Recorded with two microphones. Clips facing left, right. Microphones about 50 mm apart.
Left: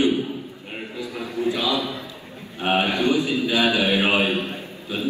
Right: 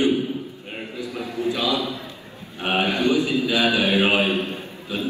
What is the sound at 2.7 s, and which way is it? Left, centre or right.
A man's voice, left.